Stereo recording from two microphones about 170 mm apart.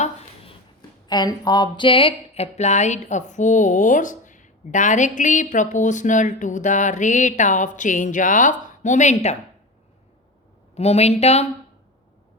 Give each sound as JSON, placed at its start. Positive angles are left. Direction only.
{"t": 0.8, "sound": "speech", "side_deg": 25}
{"t": 10.8, "sound": "speech", "side_deg": 40}